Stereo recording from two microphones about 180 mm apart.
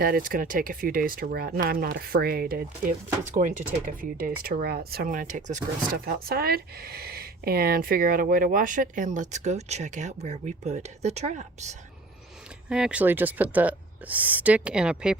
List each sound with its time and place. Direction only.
0.0 s speech: 50° right (ahead or behind)
6.1 s speech: 60° right (ahead or behind); by 11.8 s 40° right (ahead or behind)
12.6 s speech: 5° right (ahead or behind)